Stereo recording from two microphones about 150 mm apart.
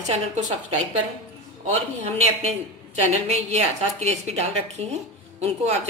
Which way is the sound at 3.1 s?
45° right (ahead or behind).